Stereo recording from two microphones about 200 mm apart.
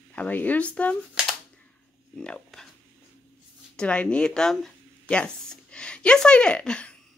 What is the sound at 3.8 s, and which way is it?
Speech, 5° left (ahead or behind).